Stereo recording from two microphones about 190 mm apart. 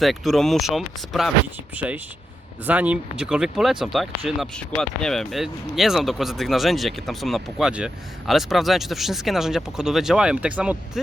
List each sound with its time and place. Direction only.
0.0 s speech: centre (ahead or behind)